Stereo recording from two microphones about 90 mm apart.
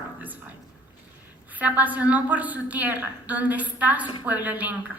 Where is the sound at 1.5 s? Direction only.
20° right (ahead or behind).